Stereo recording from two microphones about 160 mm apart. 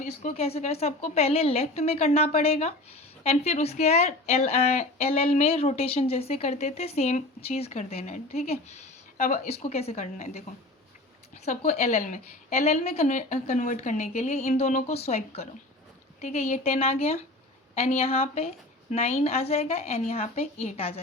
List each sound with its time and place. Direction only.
0.0 s a woman's voice: 50° left (ahead or behind)
11.4 s a woman's voice: 45° left (ahead or behind)